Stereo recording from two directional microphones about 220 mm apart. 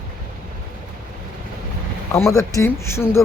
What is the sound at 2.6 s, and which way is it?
Speech, 10° left (ahead or behind).